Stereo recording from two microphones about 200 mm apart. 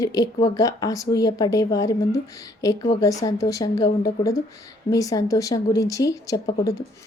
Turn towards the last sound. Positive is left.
turn(degrees=15)  # may be behind; listen again after turning